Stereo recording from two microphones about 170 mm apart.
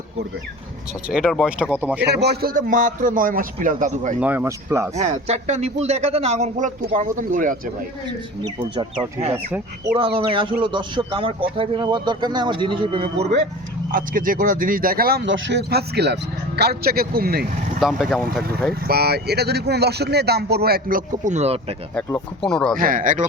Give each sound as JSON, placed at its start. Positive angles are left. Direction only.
{"t": 1.0, "sound": "speech", "side_deg": -5}
{"t": 2.0, "sound": "a man's voice", "side_deg": -75}
{"t": 4.2, "sound": "speech", "side_deg": -10}
{"t": 4.9, "sound": "a man's voice", "side_deg": -40}
{"t": 8.7, "sound": "speech", "side_deg": -30}
{"t": 9.5, "sound": "speech", "side_deg": -15}
{"t": 10.2, "sound": "a man's voice", "side_deg": -30}
{"t": 13.9, "sound": "speech", "side_deg": -55}
{"t": 16.6, "sound": "speech", "side_deg": -65}
{"t": 17.7, "sound": "speech", "side_deg": 0}
{"t": 18.9, "sound": "speech", "side_deg": -70}
{"t": 22.4, "sound": "speech", "side_deg": 5}
{"t": 22.8, "sound": "a man's voice", "side_deg": -55}